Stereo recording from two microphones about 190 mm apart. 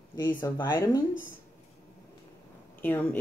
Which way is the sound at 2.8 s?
10° left (ahead or behind).